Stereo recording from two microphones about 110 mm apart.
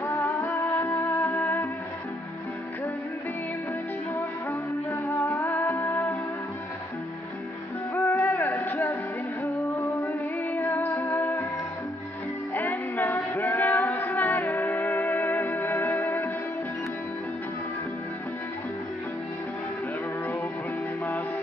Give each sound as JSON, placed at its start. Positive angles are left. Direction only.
{"t": 0.0, "sound": "music", "side_deg": 25}
{"t": 4.1, "sound": "music", "side_deg": 25}
{"t": 7.9, "sound": "a sound", "side_deg": 20}
{"t": 9.4, "sound": "music", "side_deg": 25}
{"t": 12.5, "sound": "music", "side_deg": 15}